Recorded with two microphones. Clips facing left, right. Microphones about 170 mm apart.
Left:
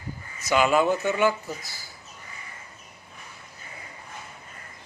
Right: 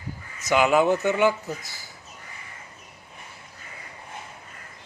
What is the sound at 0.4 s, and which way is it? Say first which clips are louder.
Speech: right 1 dB; 15° right (ahead or behind).